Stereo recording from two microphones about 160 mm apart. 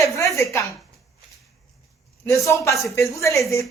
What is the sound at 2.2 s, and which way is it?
A woman's voice, 20° left (ahead or behind).